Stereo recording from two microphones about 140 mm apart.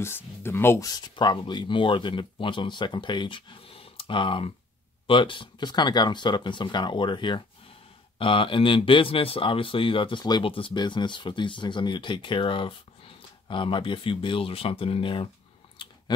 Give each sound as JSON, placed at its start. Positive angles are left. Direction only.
{"t": 0.0, "sound": "speech", "side_deg": 15}
{"t": 15.8, "sound": "chewing", "side_deg": 35}